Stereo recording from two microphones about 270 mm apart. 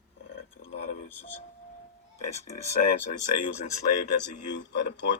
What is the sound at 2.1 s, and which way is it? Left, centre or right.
Speech, left.